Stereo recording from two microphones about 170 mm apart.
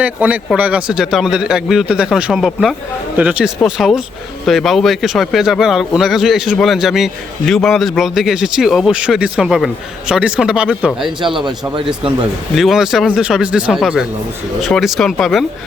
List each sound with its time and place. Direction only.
0.0 s a man's voice: 10° right (ahead or behind)
12.5 s a man's voice: centre (ahead or behind)